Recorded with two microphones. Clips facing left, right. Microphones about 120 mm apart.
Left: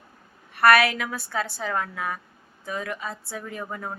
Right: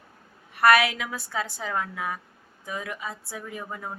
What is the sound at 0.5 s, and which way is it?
Speech, 15° right (ahead or behind).